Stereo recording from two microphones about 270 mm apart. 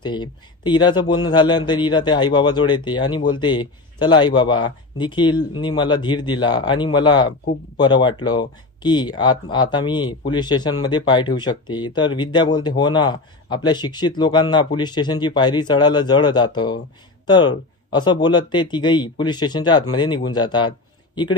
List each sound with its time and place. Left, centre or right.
0.0 s speech: centre